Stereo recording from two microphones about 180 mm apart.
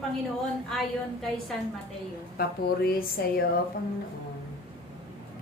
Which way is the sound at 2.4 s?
60° left (ahead or behind).